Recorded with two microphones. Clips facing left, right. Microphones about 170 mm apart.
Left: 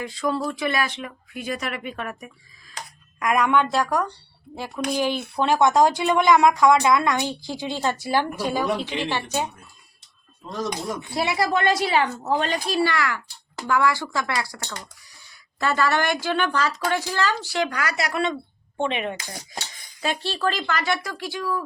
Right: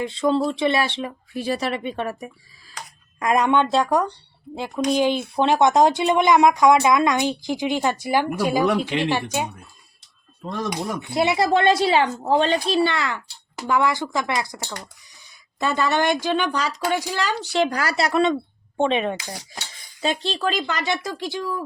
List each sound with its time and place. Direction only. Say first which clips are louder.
0.0 s speech: right 5 dB; 25° right (ahead or behind)
10.4 s speech: right 5 dB; 65° right (ahead or behind)
11.1 s speech: right 4 dB; 20° right (ahead or behind)
20.0 s speech: right 2 dB; 20° right (ahead or behind)